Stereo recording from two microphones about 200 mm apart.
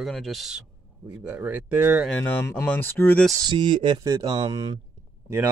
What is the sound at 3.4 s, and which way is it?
Speech, 20° right (ahead or behind).